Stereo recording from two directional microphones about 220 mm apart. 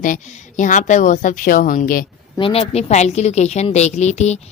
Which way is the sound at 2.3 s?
25° left (ahead or behind).